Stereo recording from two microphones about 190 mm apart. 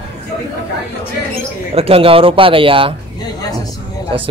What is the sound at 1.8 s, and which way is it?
Speech, 30° right (ahead or behind).